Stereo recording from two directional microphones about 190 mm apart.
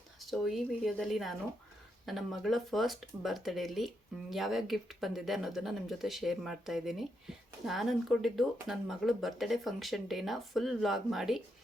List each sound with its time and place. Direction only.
0.2 s speech: centre (ahead or behind)